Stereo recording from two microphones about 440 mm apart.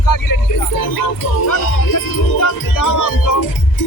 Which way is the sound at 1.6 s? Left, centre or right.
Left.